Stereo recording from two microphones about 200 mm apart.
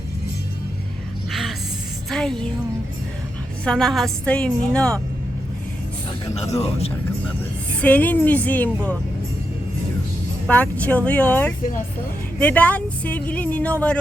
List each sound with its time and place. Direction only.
1.3 s music: centre (ahead or behind)
3.6 s a woman's voice: 5° left (ahead or behind)
6.5 s a man's voice: 30° left (ahead or behind)
7.8 s speech: 5° left (ahead or behind)
10.4 s speech: 5° left (ahead or behind)